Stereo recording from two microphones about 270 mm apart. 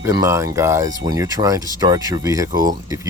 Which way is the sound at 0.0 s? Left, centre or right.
Centre.